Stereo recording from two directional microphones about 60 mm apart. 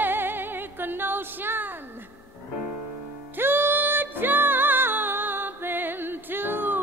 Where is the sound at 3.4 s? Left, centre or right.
Right.